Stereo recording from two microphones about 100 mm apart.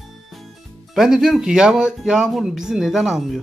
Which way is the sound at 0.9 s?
5° right (ahead or behind).